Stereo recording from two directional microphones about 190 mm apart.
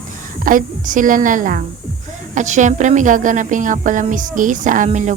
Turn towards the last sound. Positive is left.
turn(degrees=-40)  # may be behind; listen again after turning